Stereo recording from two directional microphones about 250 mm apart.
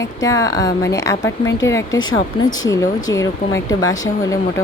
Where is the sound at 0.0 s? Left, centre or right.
Centre.